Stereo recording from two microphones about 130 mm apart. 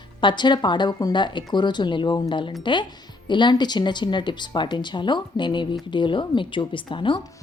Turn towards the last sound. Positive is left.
turn(degrees=35)  # may be behind; listen again after turning